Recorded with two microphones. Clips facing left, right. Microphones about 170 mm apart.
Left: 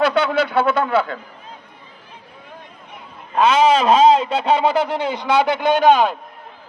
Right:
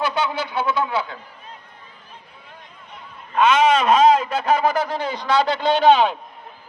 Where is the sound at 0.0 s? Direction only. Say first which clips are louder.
Left 6 dB; 65° left (ahead or behind).